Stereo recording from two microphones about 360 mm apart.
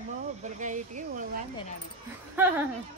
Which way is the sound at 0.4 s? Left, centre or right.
Right.